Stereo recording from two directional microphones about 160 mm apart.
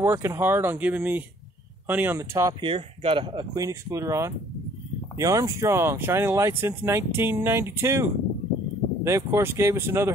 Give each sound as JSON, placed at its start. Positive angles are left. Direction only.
{"t": 0.0, "sound": "speech", "side_deg": -15}
{"t": 2.6, "sound": "speech", "side_deg": -35}